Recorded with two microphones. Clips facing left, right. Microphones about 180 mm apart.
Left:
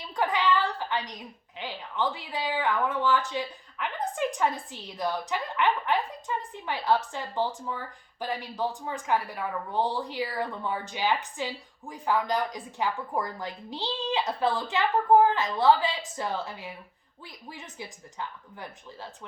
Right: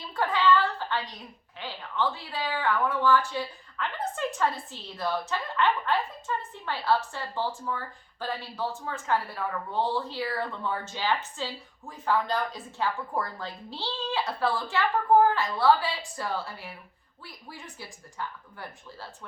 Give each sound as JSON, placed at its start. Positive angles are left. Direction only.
{"t": 0.1, "sound": "a woman's voice", "side_deg": 15}